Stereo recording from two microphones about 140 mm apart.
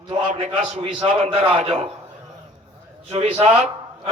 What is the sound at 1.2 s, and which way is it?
Speech, 40° right (ahead or behind).